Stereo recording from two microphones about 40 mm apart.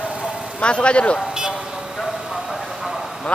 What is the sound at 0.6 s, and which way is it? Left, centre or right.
Speech, left.